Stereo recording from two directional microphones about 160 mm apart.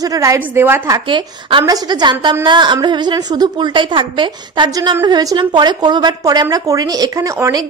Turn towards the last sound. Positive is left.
turn(degrees=-20)  # may be behind; listen again after turning